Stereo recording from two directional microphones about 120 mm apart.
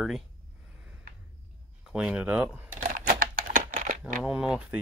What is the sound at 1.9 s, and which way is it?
Speech, 10° right (ahead or behind).